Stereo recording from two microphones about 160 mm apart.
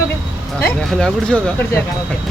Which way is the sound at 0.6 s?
5° left (ahead or behind).